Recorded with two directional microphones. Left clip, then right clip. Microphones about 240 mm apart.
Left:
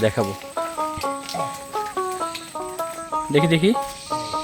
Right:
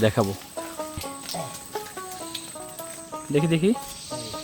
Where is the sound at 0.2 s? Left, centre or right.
Centre.